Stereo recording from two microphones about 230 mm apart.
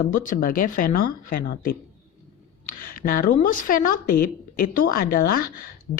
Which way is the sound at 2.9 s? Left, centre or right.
Left.